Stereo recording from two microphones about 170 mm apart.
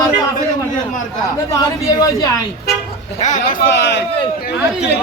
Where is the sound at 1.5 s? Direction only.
20° left (ahead or behind).